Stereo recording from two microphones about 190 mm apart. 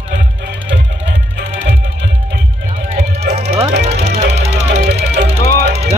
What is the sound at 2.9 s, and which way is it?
Music, 35° right (ahead or behind).